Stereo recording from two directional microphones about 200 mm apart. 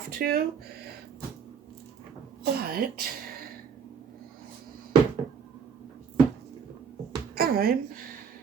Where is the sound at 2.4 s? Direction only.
50° right (ahead or behind).